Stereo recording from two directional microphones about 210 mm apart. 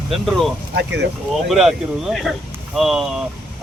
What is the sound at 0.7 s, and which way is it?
Speech, 55° right (ahead or behind).